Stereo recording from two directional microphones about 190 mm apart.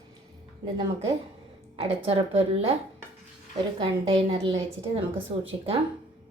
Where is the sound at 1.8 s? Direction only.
30° right (ahead or behind).